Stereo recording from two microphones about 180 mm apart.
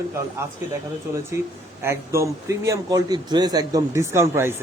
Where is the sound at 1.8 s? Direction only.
15° right (ahead or behind).